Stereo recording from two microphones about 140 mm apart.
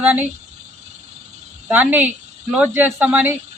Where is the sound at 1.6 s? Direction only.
10° right (ahead or behind).